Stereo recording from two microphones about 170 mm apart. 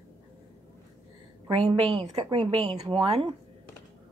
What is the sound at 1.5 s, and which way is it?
Speech, 35° right (ahead or behind).